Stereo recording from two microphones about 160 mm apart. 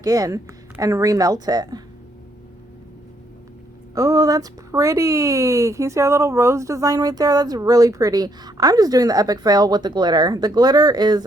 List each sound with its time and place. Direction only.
0.0 s speech: 20° right (ahead or behind)
3.9 s speech: 20° right (ahead or behind)